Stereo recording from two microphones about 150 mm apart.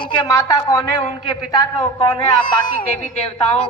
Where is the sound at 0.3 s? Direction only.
20° left (ahead or behind).